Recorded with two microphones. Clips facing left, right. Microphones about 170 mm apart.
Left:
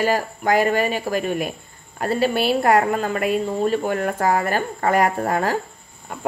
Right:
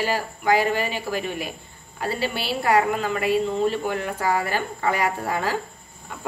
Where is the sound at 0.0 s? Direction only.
45° left (ahead or behind).